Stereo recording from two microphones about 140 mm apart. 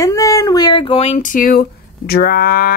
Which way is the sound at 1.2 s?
80° left.